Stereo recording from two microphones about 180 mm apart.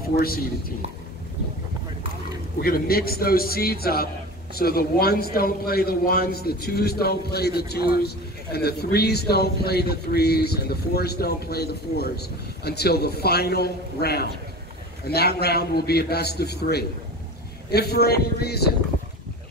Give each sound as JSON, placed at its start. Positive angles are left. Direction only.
{"t": 0.1, "sound": "speech", "side_deg": 55}
{"t": 2.6, "sound": "speech", "side_deg": 55}